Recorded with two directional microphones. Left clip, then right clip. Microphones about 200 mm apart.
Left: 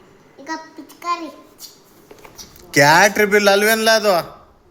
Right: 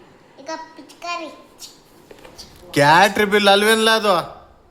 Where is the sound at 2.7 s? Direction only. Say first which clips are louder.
Left 1 dB; 5° right (ahead or behind).